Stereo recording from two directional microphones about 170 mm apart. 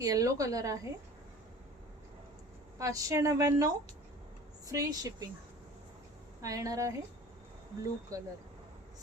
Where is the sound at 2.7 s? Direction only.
20° right (ahead or behind).